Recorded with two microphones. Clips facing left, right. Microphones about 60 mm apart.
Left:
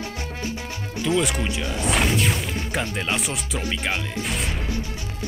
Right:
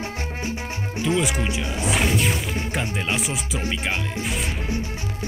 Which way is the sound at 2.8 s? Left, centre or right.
Centre.